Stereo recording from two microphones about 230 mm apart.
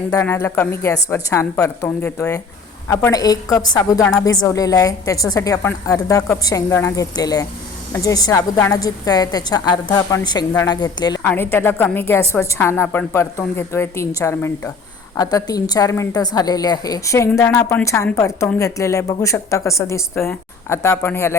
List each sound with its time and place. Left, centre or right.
0.1 s a woman's voice: centre